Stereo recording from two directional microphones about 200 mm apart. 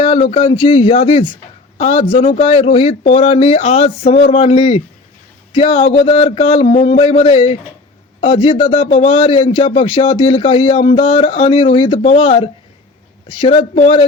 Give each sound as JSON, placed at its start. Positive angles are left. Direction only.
{"t": 0.0, "sound": "a man's voice", "side_deg": 30}